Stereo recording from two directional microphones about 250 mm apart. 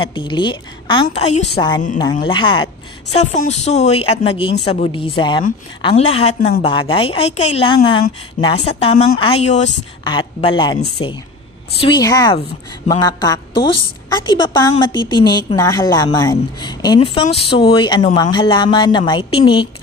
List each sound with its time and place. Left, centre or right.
0.0 s a woman's voice: centre